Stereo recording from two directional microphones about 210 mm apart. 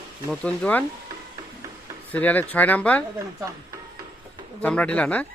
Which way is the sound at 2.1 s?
5° left (ahead or behind).